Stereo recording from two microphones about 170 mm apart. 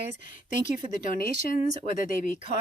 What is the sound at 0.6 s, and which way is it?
Speech, 50° left (ahead or behind).